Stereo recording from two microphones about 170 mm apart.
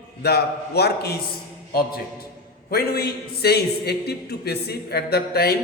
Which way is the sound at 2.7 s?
65° left (ahead or behind).